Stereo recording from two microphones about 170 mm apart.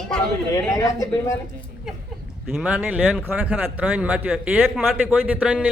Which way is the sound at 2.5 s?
5° right (ahead or behind).